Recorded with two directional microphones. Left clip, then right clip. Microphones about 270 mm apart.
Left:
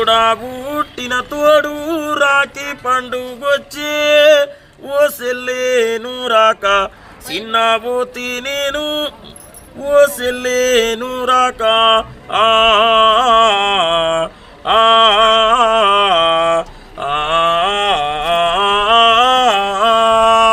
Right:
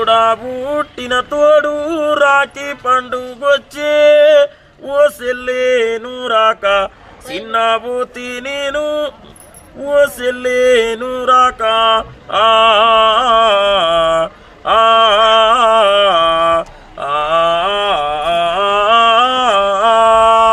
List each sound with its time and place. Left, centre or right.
0.0 s mantra: centre
9.9 s music: centre